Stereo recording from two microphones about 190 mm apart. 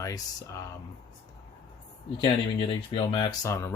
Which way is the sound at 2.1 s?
25° left (ahead or behind).